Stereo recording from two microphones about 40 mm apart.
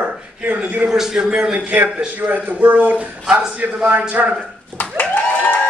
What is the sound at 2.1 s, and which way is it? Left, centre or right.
Speech, right.